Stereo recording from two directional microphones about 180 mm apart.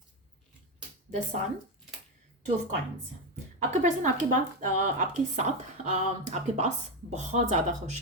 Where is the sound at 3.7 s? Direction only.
45° right (ahead or behind).